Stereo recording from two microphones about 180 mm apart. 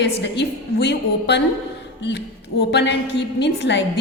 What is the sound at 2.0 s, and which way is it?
Music, 75° left (ahead or behind).